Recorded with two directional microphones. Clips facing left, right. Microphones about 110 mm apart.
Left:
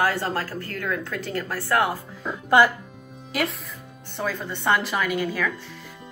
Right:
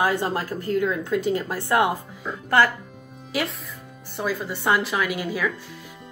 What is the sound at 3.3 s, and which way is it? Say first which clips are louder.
Speech: even; centre (ahead or behind).